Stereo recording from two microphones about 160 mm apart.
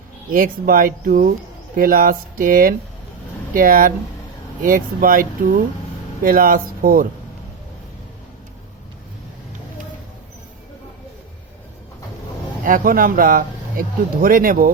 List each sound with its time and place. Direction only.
0.3 s speech: 60° right (ahead or behind)
12.6 s speech: 60° right (ahead or behind)